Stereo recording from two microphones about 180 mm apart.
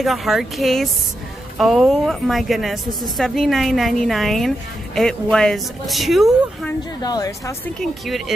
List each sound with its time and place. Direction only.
0.0 s a woman's voice: centre (ahead or behind)
7.0 s a woman's voice: 20° left (ahead or behind)